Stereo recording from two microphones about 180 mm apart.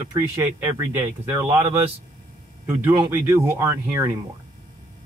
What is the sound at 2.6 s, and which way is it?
Speech, 10° right (ahead or behind).